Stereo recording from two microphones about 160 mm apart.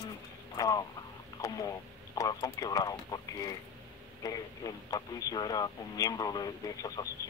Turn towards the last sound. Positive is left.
turn(degrees=25)  # may be behind; listen again after turning